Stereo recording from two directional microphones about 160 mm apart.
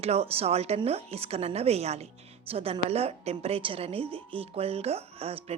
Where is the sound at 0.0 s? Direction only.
40° right (ahead or behind).